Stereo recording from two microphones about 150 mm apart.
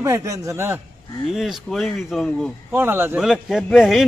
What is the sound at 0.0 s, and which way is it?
Speech, 20° right (ahead or behind).